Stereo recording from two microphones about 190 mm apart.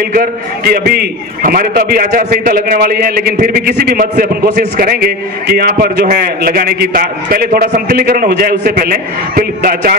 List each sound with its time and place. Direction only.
0.1 s a man's voice: 50° right (ahead or behind)